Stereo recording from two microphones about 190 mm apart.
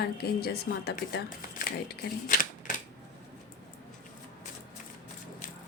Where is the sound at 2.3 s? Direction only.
45° left (ahead or behind).